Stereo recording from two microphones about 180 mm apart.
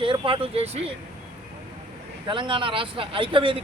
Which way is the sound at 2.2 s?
25° right (ahead or behind).